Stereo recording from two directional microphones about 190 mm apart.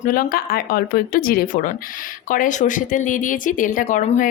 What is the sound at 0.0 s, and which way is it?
Speech, 50° left (ahead or behind).